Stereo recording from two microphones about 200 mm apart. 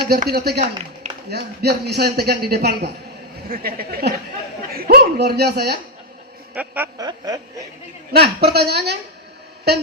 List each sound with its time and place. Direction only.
0.1 s a man's voice: 50° right (ahead or behind)
6.5 s speech: 10° right (ahead or behind)
8.1 s a man's voice: 55° right (ahead or behind)